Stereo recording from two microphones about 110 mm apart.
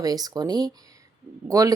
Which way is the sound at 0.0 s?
35° right (ahead or behind).